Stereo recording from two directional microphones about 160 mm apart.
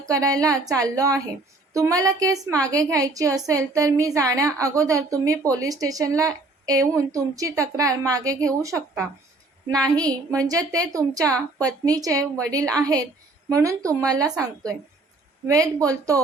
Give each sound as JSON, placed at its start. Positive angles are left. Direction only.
{"t": 0.1, "sound": "a woman's voice", "side_deg": -20}
{"t": 15.4, "sound": "a woman's voice", "side_deg": -20}